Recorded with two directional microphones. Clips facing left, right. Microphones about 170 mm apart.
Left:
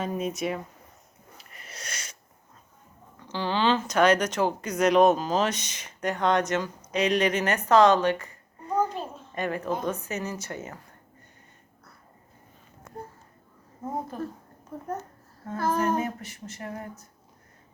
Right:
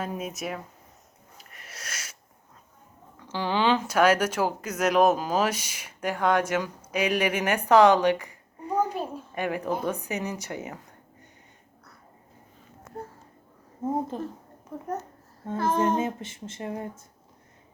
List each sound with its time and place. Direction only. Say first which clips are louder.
0.0 s speech: left 3 dB; 5° right (ahead or behind)
1.5 s wheeze: left 1 dB; centre (ahead or behind)
3.2 s a woman's voice: right 1 dB; 10° right (ahead or behind)
13.8 s humming: right 6 dB; 25° right (ahead or behind)
15.4 s humming: right 1 dB; 25° right (ahead or behind)